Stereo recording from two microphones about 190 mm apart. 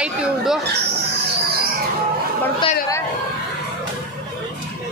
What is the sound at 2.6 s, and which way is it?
Chatter, 15° left (ahead or behind).